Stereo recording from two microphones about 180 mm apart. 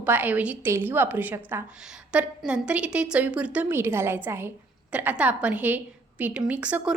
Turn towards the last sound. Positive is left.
turn(degrees=-5)  # may be behind; listen again after turning